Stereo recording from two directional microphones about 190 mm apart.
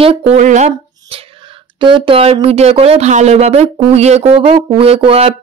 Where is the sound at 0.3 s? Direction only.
40° right (ahead or behind).